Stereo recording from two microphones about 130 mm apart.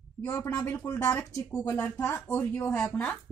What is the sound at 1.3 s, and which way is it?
Speech, 25° left (ahead or behind).